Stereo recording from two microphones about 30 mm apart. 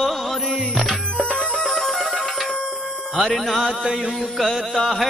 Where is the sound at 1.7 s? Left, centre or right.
Centre.